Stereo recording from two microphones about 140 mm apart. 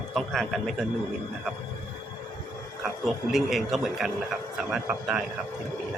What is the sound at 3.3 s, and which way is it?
A man's voice, centre (ahead or behind).